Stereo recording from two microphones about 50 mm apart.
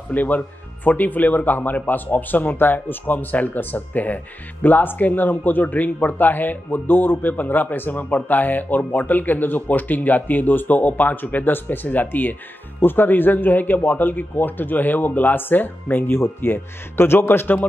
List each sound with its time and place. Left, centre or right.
0.1 s a man's voice: left